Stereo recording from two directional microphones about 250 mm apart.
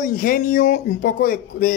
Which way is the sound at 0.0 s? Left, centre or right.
Left.